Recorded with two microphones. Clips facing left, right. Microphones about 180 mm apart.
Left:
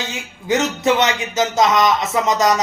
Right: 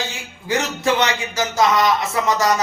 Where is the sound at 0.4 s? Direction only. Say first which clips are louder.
Left 3 dB; 20° left (ahead or behind).